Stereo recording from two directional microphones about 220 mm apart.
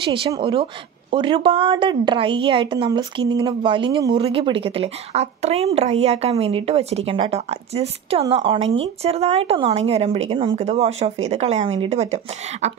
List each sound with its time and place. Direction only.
0.0 s speech: 25° right (ahead or behind)